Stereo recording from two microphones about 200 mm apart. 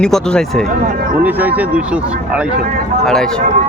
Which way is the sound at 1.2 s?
10° right (ahead or behind).